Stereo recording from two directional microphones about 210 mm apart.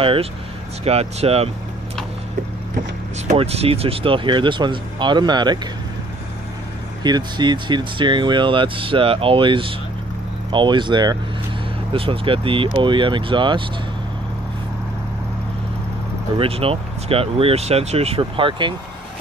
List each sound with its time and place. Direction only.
0.0 s speech: 25° right (ahead or behind)
3.3 s speech: 30° right (ahead or behind)
7.0 s speech: 20° right (ahead or behind)
16.3 s speech: 25° right (ahead or behind)